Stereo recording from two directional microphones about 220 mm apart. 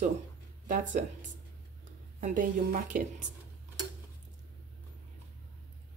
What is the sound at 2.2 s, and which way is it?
Speech, 40° right (ahead or behind).